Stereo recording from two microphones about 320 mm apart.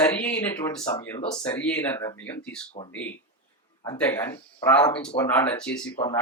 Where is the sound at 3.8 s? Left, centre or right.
Centre.